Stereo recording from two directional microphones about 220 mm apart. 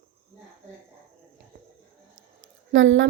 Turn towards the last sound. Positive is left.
turn(degrees=-60)  # may be behind; listen again after turning